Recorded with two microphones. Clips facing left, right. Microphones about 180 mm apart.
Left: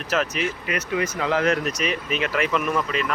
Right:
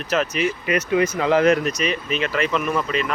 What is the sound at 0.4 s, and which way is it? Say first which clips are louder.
Speech: right 5 dB; 20° right (ahead or behind).